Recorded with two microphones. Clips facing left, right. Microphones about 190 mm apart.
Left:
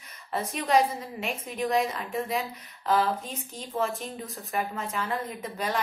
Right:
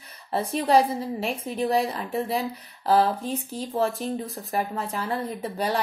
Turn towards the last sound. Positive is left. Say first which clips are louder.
# right 5 dB
turn(degrees=-35)  # may be behind; listen again after turning